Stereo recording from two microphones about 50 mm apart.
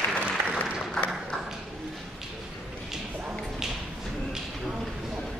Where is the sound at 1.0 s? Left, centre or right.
Centre.